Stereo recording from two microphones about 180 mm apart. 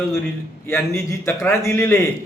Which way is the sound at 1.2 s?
15° left (ahead or behind).